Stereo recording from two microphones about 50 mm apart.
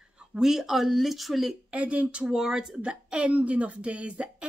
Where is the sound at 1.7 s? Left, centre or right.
Right.